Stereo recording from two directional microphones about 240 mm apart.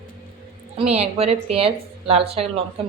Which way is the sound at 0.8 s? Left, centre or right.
Right.